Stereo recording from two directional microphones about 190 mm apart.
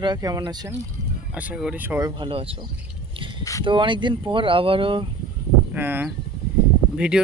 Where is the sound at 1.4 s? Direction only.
5° right (ahead or behind); by 2.6 s 30° right (ahead or behind).